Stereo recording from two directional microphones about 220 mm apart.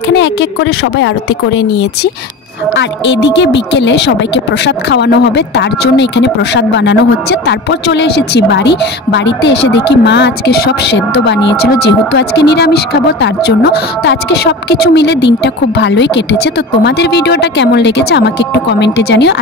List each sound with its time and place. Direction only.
0.1 s speech: 50° left (ahead or behind)
2.7 s speech: 55° left (ahead or behind)